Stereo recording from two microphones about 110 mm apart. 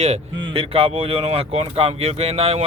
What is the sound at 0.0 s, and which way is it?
Speech, 65° right (ahead or behind).